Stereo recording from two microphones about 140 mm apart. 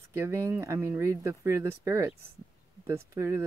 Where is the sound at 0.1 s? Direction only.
20° right (ahead or behind).